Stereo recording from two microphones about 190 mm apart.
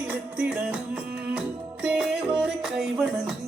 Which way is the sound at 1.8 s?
5° right (ahead or behind).